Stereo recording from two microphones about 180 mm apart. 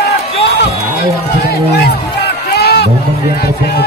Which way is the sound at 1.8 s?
65° left (ahead or behind).